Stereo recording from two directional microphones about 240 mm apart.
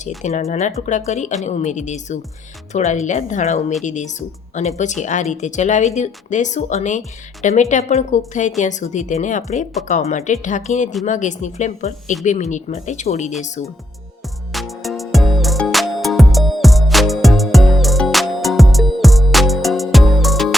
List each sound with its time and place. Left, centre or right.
0.2 s a woman's voice: left
14.5 s music: centre